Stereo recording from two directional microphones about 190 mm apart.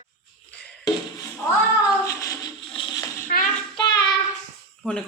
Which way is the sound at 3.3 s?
50° left (ahead or behind).